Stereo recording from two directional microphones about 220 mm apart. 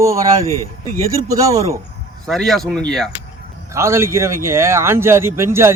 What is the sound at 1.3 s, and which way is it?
Speech, 15° right (ahead or behind).